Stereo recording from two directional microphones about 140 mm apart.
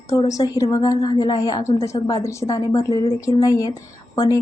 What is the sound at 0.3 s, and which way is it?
A woman's voice, 25° left (ahead or behind).